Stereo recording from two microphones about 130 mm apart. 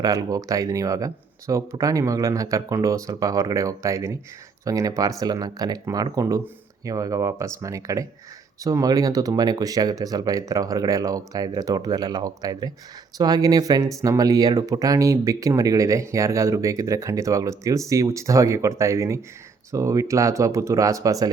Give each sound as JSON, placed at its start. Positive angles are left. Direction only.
{"t": 0.0, "sound": "speech", "side_deg": -30}